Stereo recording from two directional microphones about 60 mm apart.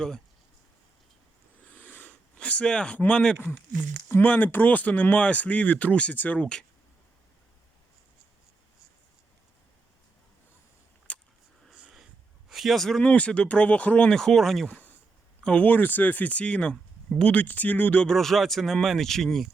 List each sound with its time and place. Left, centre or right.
1.6 s a sound: left
2.4 s speech: centre
4.2 s speech: left
11.1 s a sound: left
11.7 s sniff: centre
12.5 s a man's voice: centre
13.0 s speech: centre
14.7 s a sound: left
15.4 s speech: left
17.3 s speech: left
18.0 s speech: centre